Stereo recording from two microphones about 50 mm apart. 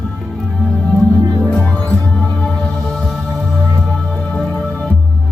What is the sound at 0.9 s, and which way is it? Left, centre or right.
Music, centre.